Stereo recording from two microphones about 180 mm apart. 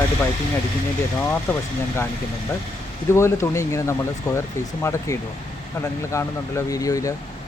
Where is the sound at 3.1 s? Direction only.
15° left (ahead or behind).